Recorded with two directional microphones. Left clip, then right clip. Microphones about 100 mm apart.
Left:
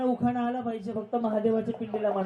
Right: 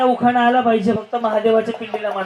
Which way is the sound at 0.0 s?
25° right (ahead or behind).